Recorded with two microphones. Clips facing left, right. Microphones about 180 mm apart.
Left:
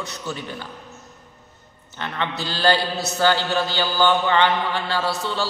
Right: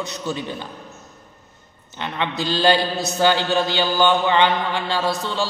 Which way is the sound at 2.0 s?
15° right (ahead or behind).